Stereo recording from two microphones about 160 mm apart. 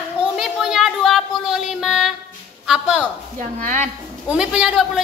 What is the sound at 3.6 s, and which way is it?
Speech, 55° right (ahead or behind).